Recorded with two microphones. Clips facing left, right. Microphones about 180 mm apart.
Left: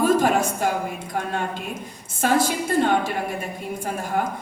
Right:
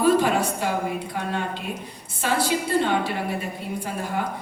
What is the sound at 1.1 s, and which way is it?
A woman's voice, 45° left (ahead or behind).